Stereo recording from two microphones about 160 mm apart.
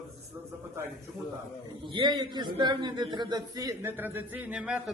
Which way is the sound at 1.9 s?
30° right (ahead or behind).